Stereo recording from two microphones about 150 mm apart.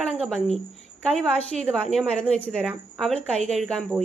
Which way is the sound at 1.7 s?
5° left (ahead or behind).